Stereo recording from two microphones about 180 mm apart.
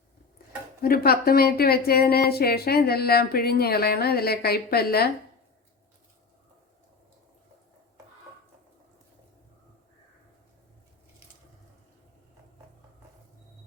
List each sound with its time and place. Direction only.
0.8 s a woman's voice: 55° left (ahead or behind)